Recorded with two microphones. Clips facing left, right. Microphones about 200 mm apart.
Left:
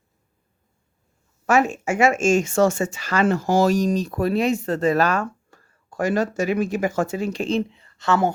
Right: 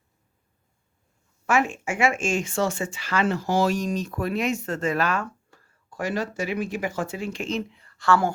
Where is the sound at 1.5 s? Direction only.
40° left (ahead or behind).